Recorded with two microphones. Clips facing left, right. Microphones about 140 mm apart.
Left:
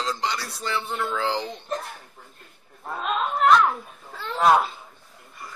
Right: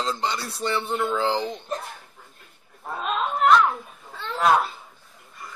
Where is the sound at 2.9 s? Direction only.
Centre (ahead or behind).